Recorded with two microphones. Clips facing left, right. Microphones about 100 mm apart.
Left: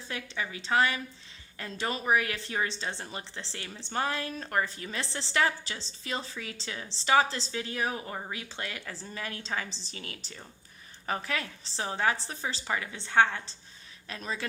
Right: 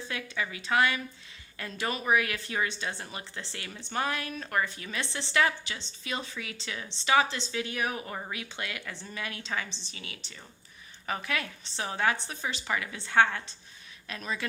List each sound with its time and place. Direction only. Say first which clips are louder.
0.1 s a woman's voice: even; 30° left (ahead or behind); by 10.3 s 45° left (ahead or behind)
11.0 s a woman's voice: even; 35° left (ahead or behind)